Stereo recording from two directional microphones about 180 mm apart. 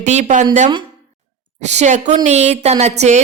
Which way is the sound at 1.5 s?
40° right (ahead or behind).